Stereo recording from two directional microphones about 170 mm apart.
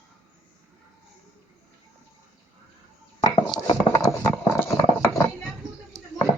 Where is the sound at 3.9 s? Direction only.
20° left (ahead or behind).